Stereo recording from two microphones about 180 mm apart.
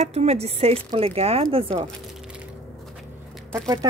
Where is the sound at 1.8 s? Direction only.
5° right (ahead or behind).